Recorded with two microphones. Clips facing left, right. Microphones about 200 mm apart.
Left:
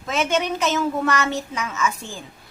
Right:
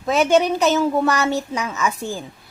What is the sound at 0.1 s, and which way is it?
A woman's voice, 35° right (ahead or behind).